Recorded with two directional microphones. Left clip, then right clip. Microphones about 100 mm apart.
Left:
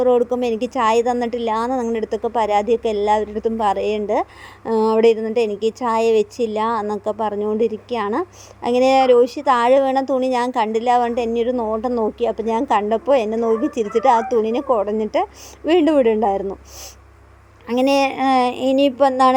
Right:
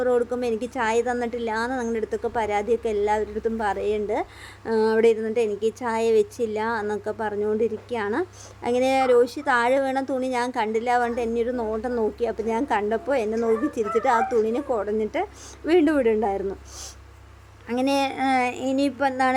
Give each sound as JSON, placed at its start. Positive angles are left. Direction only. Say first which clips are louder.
{"t": 0.0, "sound": "a woman's voice", "louder": "left 6 dB", "side_deg": 25}
{"t": 12.2, "sound": "a woman's voice", "louder": "left 5 dB", "side_deg": 30}
{"t": 17.7, "sound": "a woman's voice", "louder": "left 7 dB", "side_deg": 30}